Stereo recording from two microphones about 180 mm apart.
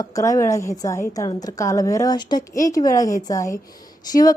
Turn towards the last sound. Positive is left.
turn(degrees=20)  # may be behind; listen again after turning